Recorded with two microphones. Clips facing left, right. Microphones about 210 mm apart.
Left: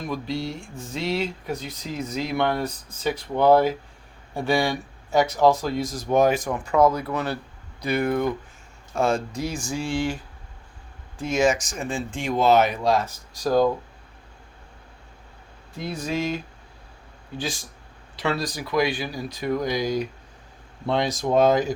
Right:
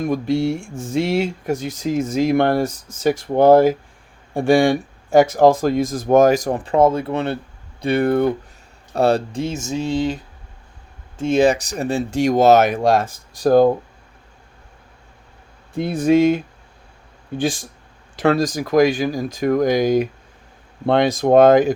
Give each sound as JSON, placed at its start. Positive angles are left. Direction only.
{"t": 0.0, "sound": "speech", "side_deg": -50}
{"t": 11.2, "sound": "speech", "side_deg": -30}
{"t": 12.3, "sound": "speech", "side_deg": -80}
{"t": 12.7, "sound": "speech", "side_deg": -50}
{"t": 15.7, "sound": "speech", "side_deg": -55}